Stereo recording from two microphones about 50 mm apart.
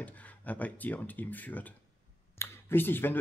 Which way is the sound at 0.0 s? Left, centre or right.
Left.